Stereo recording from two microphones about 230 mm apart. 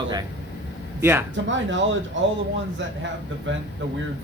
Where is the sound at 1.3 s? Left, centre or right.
Right.